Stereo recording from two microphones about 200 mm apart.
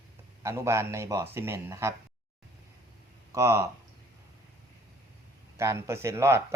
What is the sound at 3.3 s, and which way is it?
Speech, 15° right (ahead or behind).